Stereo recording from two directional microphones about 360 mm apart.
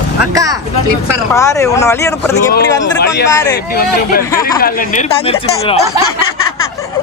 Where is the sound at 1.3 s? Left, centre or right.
Centre.